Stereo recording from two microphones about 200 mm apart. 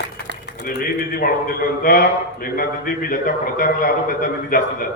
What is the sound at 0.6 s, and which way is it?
A man's voice, 45° left (ahead or behind).